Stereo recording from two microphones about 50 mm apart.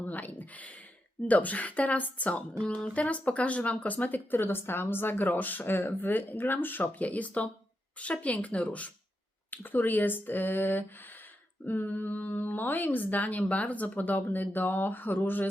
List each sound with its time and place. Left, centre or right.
0.0 s a sound: left
1.3 s a woman's voice: left
7.0 s a woman's voice: left
9.5 s a woman's voice: left